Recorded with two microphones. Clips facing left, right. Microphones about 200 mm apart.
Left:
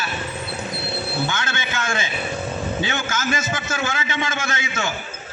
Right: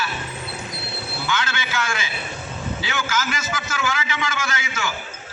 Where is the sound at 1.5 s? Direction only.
25° left (ahead or behind).